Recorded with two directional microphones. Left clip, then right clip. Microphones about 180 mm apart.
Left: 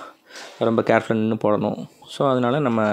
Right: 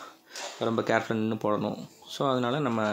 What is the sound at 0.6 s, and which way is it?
Speech, 35° left (ahead or behind).